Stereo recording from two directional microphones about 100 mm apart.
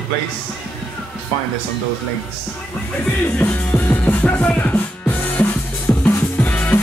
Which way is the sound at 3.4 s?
20° left (ahead or behind).